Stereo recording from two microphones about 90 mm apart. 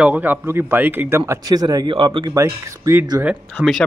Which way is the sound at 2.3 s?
30° right (ahead or behind).